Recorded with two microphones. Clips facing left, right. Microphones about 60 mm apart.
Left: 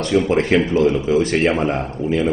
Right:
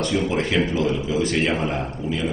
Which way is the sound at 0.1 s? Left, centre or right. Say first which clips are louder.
Left 10 dB; left.